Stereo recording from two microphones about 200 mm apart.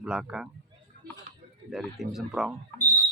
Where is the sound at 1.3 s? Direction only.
40° right (ahead or behind).